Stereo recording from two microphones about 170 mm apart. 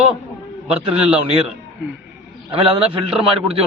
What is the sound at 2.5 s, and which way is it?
Speech, 35° right (ahead or behind).